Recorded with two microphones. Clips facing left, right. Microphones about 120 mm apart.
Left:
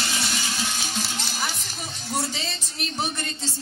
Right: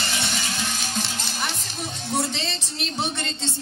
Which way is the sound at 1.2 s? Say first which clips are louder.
Right 1 dB; centre (ahead or behind).